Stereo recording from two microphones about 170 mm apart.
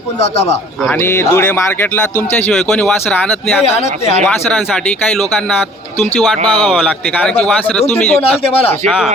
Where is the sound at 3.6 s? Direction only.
40° left (ahead or behind).